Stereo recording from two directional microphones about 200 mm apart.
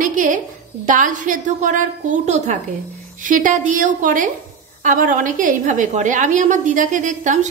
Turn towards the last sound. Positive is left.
turn(degrees=-40)  # may be behind; listen again after turning